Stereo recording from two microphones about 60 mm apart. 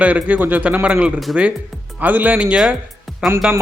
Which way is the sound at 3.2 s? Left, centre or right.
Centre.